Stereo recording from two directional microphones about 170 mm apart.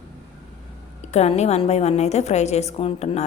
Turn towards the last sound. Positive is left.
turn(degrees=35)  # may be behind; listen again after turning